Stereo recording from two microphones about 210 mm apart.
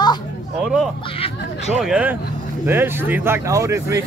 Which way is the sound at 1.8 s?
5° right (ahead or behind).